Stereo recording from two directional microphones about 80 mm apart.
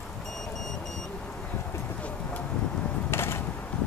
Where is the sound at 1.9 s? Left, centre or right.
Centre.